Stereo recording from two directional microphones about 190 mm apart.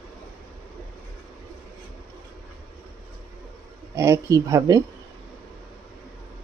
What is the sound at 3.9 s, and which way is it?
Speech, 15° right (ahead or behind).